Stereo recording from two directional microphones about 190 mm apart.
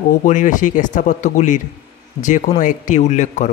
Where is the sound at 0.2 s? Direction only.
40° left (ahead or behind).